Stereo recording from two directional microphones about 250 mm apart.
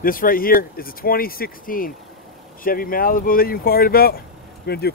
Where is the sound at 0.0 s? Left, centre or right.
Left.